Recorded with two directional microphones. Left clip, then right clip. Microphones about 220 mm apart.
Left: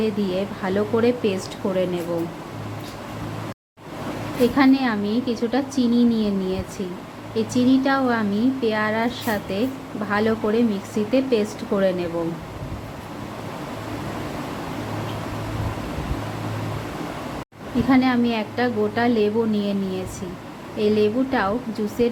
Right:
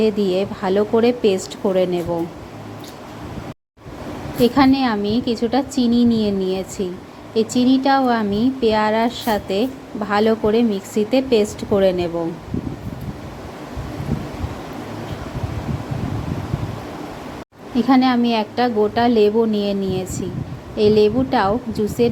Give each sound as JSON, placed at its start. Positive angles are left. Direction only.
{"t": 0.0, "sound": "speech", "side_deg": -20}
{"t": 4.4, "sound": "speech", "side_deg": -20}
{"t": 17.8, "sound": "a woman's voice", "side_deg": -20}